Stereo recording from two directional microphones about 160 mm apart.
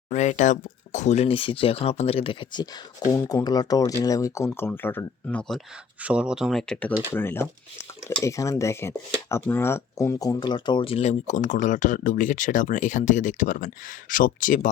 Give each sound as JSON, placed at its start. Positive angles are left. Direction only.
{"t": 0.1, "sound": "speech", "side_deg": 50}
{"t": 6.0, "sound": "speech", "side_deg": -5}